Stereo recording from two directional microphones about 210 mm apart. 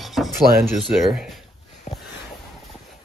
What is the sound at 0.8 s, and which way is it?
Speech, centre (ahead or behind).